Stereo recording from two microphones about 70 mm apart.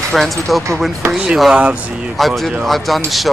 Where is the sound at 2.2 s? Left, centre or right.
Centre.